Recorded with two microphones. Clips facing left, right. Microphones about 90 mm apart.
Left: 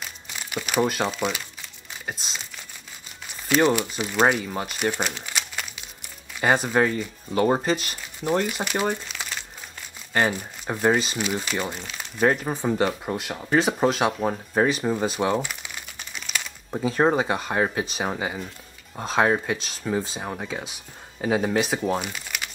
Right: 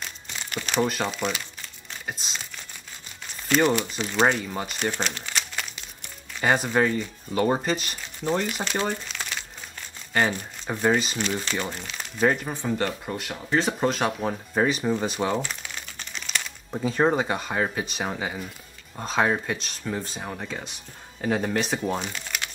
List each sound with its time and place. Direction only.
0.0 s crumpling: 5° left (ahead or behind)
3.7 s speech: 5° left (ahead or behind)
12.4 s speech: 15° left (ahead or behind)